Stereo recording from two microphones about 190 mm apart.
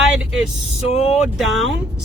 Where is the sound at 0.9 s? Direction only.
35° left (ahead or behind).